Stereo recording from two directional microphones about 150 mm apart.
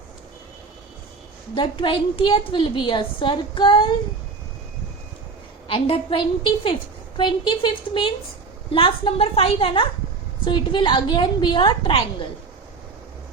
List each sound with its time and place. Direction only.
1.5 s a woman's voice: 35° left (ahead or behind)
5.6 s a woman's voice: 35° left (ahead or behind)